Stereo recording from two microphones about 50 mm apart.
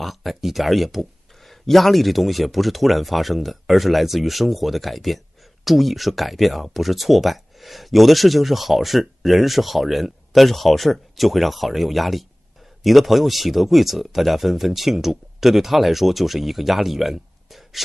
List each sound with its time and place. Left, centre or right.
0.0 s speech: centre